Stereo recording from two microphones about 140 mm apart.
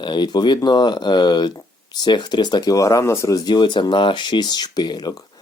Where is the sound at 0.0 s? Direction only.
30° left (ahead or behind).